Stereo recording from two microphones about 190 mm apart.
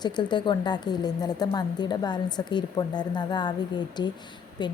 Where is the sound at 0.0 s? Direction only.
25° left (ahead or behind).